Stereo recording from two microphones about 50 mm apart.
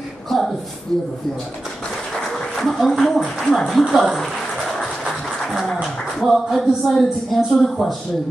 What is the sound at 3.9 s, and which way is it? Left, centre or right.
Music, centre.